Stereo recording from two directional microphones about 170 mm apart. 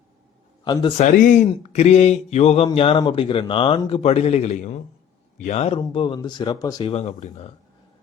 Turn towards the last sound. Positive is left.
turn(degrees=40)  # may be behind; listen again after turning